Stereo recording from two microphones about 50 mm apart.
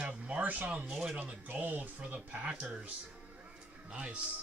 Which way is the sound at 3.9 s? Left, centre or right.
Right.